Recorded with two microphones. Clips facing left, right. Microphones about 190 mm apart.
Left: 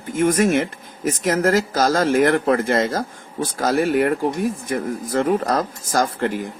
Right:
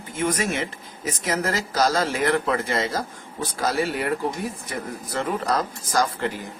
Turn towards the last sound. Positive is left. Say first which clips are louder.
# left 3 dB
turn(degrees=50)  # may be behind; listen again after turning